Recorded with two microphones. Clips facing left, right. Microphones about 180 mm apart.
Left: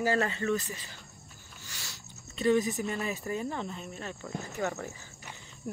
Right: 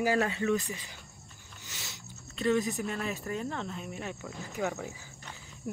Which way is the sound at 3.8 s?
10° right (ahead or behind).